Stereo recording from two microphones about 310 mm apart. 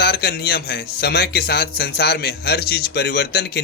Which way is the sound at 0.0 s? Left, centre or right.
Left.